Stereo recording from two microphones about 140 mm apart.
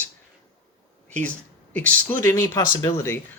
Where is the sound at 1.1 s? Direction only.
10° left (ahead or behind).